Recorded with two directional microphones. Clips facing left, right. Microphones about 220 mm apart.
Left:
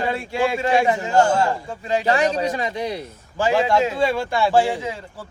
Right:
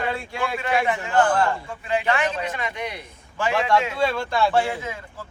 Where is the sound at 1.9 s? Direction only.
35° left (ahead or behind).